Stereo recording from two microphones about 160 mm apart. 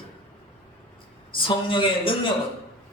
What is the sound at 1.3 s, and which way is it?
Speech, 30° left (ahead or behind).